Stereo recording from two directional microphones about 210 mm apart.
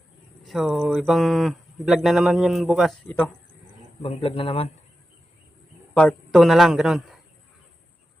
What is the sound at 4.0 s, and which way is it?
Speech, 25° left (ahead or behind).